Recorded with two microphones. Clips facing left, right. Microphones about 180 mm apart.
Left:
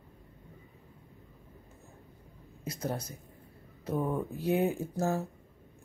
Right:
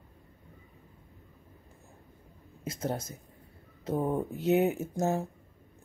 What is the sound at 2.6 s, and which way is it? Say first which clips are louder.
Speech: right 2 dB; 25° right (ahead or behind).